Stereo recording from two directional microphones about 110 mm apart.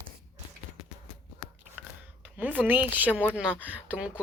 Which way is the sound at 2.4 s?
15° right (ahead or behind).